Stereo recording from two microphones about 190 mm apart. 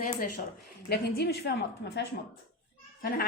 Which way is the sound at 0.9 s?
55° left (ahead or behind).